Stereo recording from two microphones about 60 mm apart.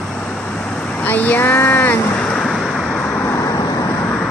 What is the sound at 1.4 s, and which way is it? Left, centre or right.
Speech, left.